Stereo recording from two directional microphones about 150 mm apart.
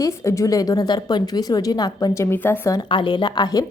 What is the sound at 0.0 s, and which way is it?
A woman's voice, 20° left (ahead or behind).